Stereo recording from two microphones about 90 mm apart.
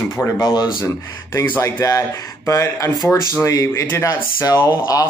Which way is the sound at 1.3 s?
30° left (ahead or behind).